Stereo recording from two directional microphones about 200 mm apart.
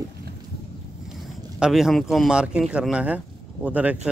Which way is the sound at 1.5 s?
5° right (ahead or behind).